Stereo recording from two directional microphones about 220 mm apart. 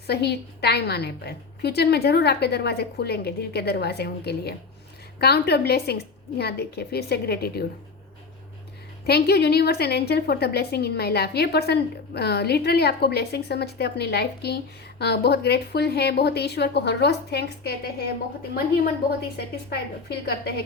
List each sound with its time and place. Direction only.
0.1 s a woman's voice: 45° left (ahead or behind)
9.0 s a woman's voice: 45° left (ahead or behind)
19.4 s a woman's voice: 45° left (ahead or behind)